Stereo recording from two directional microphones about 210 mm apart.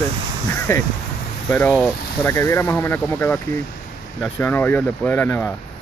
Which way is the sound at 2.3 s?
15° left (ahead or behind).